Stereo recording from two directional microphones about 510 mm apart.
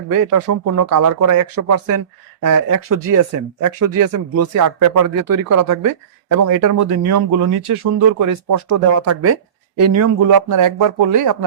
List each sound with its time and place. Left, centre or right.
0.1 s speech: right